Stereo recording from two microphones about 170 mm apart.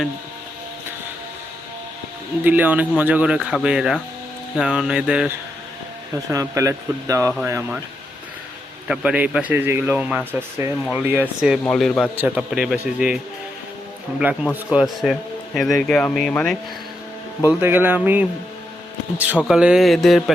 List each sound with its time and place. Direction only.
2.4 s a man's voice: 10° right (ahead or behind)
6.3 s speech: 20° right (ahead or behind)
8.9 s a man's voice: 5° right (ahead or behind)
12.1 s speech: 10° right (ahead or behind)
14.5 s a man's voice: 5° right (ahead or behind)
17.4 s a man's voice: 10° right (ahead or behind)